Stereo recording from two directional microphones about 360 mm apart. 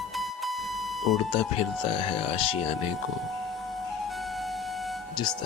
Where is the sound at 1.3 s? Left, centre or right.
Centre.